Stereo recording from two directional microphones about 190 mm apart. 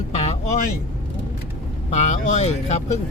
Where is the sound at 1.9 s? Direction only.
40° left (ahead or behind).